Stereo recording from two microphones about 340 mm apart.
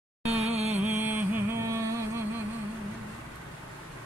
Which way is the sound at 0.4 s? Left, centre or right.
Centre.